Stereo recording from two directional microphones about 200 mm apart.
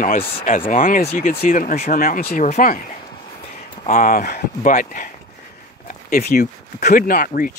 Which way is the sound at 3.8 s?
45° left (ahead or behind).